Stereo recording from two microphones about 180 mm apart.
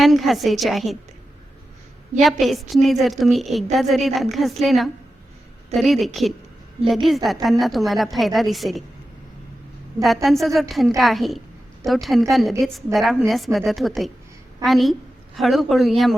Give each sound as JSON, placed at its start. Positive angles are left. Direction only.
{"t": 0.0, "sound": "a woman's voice", "side_deg": 0}
{"t": 2.2, "sound": "a woman's voice", "side_deg": 0}
{"t": 10.0, "sound": "a woman's voice", "side_deg": 0}